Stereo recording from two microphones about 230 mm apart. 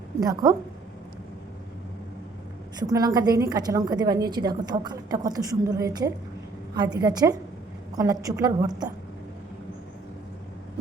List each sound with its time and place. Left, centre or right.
0.2 s a woman's voice: centre
2.7 s a woman's voice: centre